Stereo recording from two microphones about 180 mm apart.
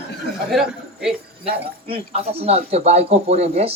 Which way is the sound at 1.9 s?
35° right (ahead or behind).